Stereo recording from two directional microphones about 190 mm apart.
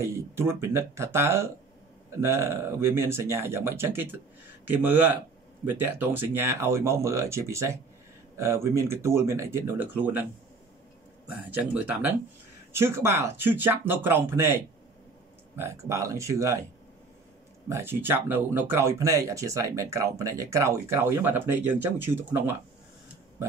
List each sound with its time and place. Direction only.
0.0 s speech: 15° right (ahead or behind)
11.2 s speech: 10° right (ahead or behind)
17.6 s speech: 10° right (ahead or behind)